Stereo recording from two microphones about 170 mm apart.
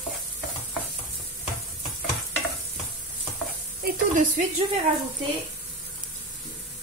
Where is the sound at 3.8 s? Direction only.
50° right (ahead or behind).